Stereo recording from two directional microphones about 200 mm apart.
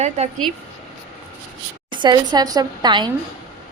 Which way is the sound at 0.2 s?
35° right (ahead or behind).